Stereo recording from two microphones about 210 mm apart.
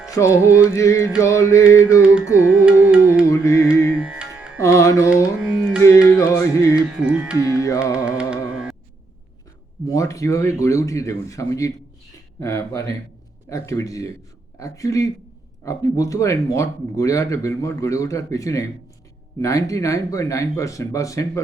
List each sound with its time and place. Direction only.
0.2 s speech: 15° left (ahead or behind)
2.0 s music: 5° right (ahead or behind)
3.2 s music: 15° left (ahead or behind)
3.9 s music: 5° right (ahead or behind)
4.6 s music: 15° left (ahead or behind)
5.4 s music: 5° right (ahead or behind)
6.1 s carnatic music: 15° left (ahead or behind)
6.8 s music: 5° right (ahead or behind)
7.4 s music: 15° left (ahead or behind)
7.9 s carnatic music: 5° right (ahead or behind)
9.9 s speech: 15° left (ahead or behind)